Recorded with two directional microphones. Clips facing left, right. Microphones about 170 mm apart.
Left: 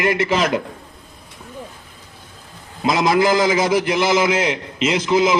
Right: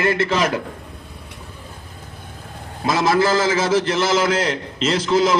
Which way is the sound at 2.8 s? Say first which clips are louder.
Left 1 dB; 15° left (ahead or behind).